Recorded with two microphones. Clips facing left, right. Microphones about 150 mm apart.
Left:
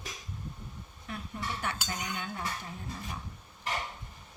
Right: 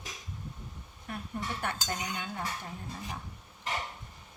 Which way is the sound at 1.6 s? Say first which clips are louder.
Right 2 dB; 50° right (ahead or behind).